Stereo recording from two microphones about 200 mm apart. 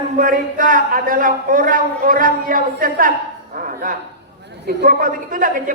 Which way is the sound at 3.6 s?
45° right (ahead or behind).